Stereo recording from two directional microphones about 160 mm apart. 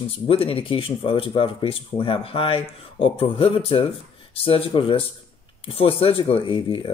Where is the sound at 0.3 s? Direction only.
35° left (ahead or behind).